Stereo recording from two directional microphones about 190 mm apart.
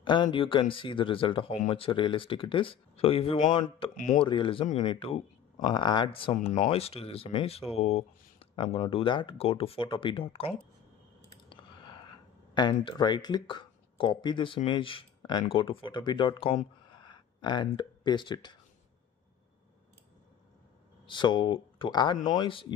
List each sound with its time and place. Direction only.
0.0 s speech: 25° left (ahead or behind)
3.9 s speech: 40° left (ahead or behind)
4.2 s speech: 25° left (ahead or behind)
16.9 s a sound: 25° left (ahead or behind)
21.1 s speech: 25° left (ahead or behind)